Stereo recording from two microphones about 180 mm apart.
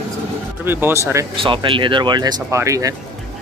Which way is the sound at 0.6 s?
15° right (ahead or behind).